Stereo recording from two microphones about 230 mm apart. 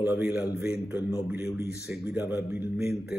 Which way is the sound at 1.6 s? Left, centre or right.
Left.